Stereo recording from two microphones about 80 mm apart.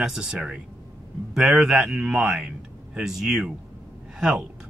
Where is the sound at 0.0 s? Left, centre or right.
Centre.